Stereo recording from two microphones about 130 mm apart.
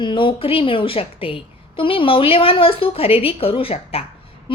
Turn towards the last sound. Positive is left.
turn(degrees=50)  # may be behind; listen again after turning